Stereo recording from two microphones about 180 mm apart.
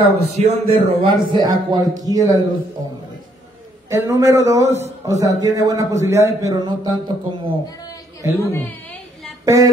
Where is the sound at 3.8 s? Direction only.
15° right (ahead or behind).